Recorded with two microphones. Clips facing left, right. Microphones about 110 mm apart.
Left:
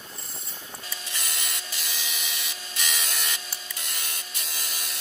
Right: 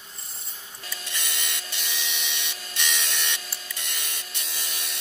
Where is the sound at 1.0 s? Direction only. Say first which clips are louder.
Right 3 dB; centre (ahead or behind).